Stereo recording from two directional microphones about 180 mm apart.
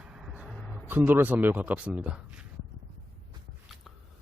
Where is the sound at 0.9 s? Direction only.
10° right (ahead or behind).